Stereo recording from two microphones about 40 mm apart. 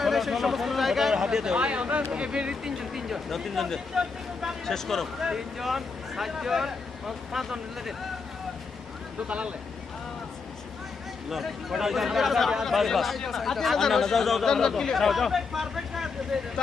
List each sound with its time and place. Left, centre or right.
0.0 s a sound: centre
1.1 s a sound: centre
1.5 s speech: right; by 3.2 s centre
3.2 s speech: centre
3.9 s speech: centre
4.6 s speech: centre
5.2 s speech: centre
9.2 s speech: right
11.3 s speech: centre